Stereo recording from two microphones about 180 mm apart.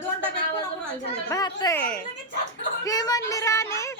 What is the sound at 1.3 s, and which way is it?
Speech, 20° left (ahead or behind).